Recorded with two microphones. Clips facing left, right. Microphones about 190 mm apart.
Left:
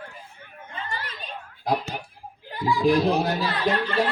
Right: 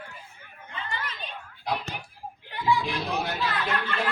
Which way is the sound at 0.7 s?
40° left (ahead or behind).